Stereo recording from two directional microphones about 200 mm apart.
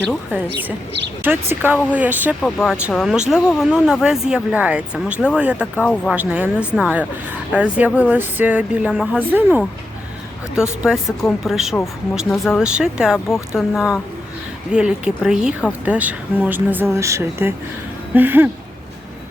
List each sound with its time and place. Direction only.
0.1 s speech: 5° right (ahead or behind)
5.7 s speech: 10° left (ahead or behind)
6.1 s speech: 10° right (ahead or behind)
13.1 s speech: 10° left (ahead or behind)
13.6 s speech: centre (ahead or behind)